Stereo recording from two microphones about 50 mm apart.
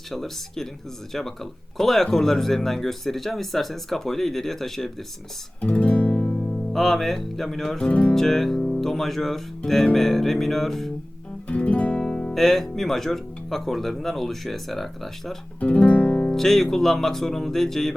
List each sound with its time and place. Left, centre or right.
0.1 s speech: centre
1.8 s speech: centre
5.5 s music: left
6.7 s speech: centre
7.8 s music: left
8.1 s speech: centre
11.4 s music: left
12.3 s speech: centre
15.6 s music: left
16.3 s speech: centre